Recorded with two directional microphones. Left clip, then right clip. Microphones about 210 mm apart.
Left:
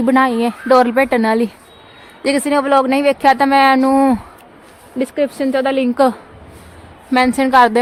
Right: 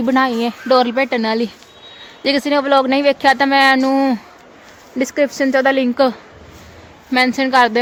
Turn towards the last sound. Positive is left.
turn(degrees=10)  # may be behind; listen again after turning